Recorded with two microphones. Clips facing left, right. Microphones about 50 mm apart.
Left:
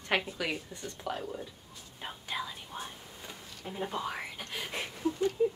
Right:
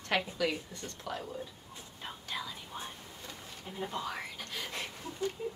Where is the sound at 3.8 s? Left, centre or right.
Centre.